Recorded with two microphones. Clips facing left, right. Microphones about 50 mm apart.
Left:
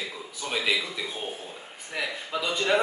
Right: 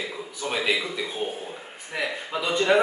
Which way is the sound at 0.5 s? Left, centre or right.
Centre.